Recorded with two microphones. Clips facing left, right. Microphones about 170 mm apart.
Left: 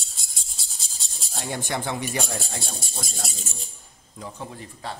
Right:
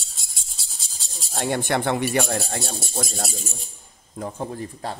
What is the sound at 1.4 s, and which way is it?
A man's voice, 65° right (ahead or behind).